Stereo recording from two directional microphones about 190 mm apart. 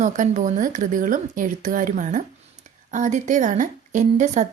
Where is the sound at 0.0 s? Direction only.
40° right (ahead or behind).